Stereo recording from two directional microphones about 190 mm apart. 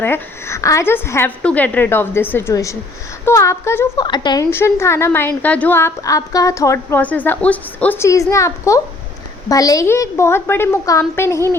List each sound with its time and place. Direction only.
0.0 s a woman's voice: 10° left (ahead or behind)